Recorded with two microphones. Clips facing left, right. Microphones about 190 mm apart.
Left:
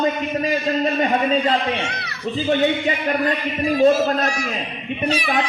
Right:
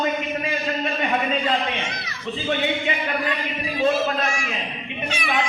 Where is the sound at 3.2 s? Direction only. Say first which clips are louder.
Left 6 dB; 45° left (ahead or behind).